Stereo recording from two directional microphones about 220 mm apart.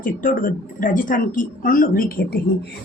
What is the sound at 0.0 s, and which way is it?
A woman's voice, 40° left (ahead or behind).